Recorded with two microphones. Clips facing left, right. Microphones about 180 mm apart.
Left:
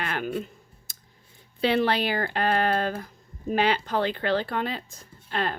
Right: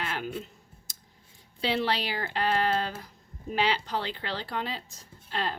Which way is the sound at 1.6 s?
55° left (ahead or behind).